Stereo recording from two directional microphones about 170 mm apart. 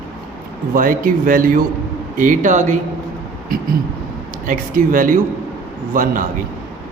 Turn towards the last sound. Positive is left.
turn(degrees=-55)  # may be behind; listen again after turning